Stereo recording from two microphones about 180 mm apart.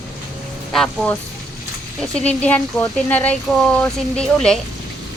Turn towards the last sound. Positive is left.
turn(degrees=5)  # may be behind; listen again after turning